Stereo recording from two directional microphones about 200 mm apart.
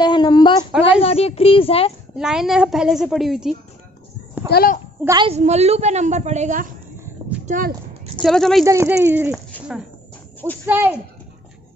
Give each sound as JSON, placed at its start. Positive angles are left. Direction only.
{"t": 0.0, "sound": "a sound", "side_deg": 20}
{"t": 1.0, "sound": "speech", "side_deg": 30}
{"t": 2.1, "sound": "a woman's voice", "side_deg": 0}
{"t": 4.5, "sound": "a child's voice", "side_deg": 45}
{"t": 5.0, "sound": "a child's voice", "side_deg": -20}
{"t": 5.3, "sound": "a woman's voice", "side_deg": -35}
{"t": 7.4, "sound": "a sound", "side_deg": -40}
{"t": 8.2, "sound": "a woman's voice", "side_deg": 0}
{"t": 8.6, "sound": "speech", "side_deg": -15}
{"t": 10.7, "sound": "speech", "side_deg": -10}